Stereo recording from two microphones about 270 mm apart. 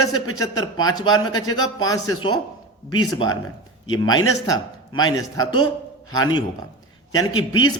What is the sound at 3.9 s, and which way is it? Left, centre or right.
A man's voice, centre.